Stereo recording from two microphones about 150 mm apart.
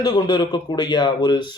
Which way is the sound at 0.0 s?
30° left (ahead or behind).